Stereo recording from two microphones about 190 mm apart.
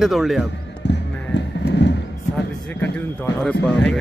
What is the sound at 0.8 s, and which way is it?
Music, 65° left (ahead or behind).